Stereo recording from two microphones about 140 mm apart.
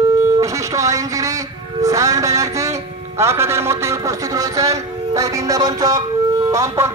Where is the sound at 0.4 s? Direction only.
25° right (ahead or behind).